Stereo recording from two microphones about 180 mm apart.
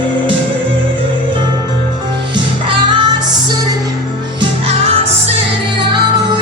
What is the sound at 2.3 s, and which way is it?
Music, 25° right (ahead or behind).